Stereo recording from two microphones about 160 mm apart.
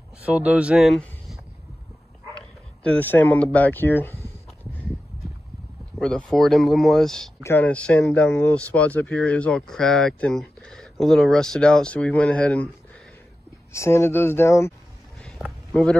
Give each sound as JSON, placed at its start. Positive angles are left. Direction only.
{"t": 0.2, "sound": "speech", "side_deg": -10}
{"t": 5.9, "sound": "speech", "side_deg": 5}
{"t": 13.7, "sound": "speech", "side_deg": 15}
{"t": 15.1, "sound": "a sound", "side_deg": 5}
{"t": 15.7, "sound": "speech", "side_deg": 5}